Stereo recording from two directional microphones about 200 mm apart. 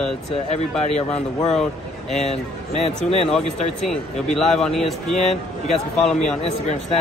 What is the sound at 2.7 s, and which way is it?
Speech, 30° left (ahead or behind).